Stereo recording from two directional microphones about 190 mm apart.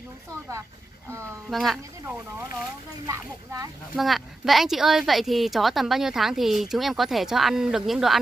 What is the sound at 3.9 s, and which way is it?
A woman's voice, centre (ahead or behind).